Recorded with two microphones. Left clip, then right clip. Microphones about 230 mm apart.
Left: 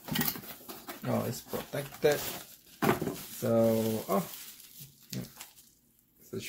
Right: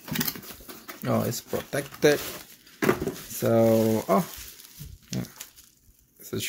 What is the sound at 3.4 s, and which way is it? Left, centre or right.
Speech, right.